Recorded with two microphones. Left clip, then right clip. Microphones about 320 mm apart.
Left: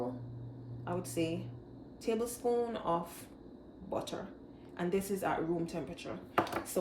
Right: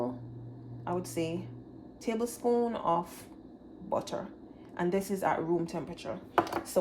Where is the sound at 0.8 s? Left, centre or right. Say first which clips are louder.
Right 2 dB; centre.